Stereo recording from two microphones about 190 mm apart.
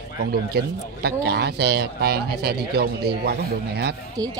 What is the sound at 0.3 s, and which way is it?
Speech, 55° right (ahead or behind).